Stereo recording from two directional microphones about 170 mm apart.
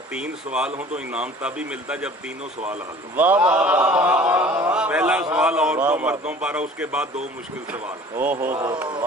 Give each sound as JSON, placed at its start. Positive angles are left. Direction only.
{"t": 0.1, "sound": "speech", "side_deg": -5}
{"t": 3.2, "sound": "speech", "side_deg": -10}
{"t": 8.3, "sound": "speech", "side_deg": -15}
{"t": 8.5, "sound": "speech", "side_deg": -25}